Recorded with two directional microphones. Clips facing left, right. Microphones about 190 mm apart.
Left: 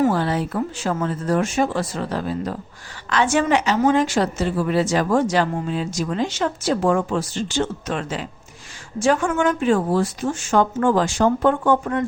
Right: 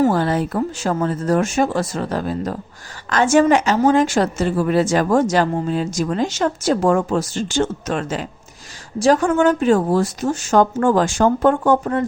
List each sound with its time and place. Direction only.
0.0 s a woman's voice: 45° right (ahead or behind)